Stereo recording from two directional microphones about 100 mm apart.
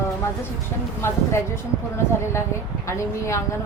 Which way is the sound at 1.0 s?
25° left (ahead or behind).